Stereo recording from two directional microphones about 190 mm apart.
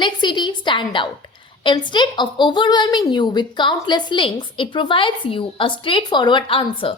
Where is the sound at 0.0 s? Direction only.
25° left (ahead or behind).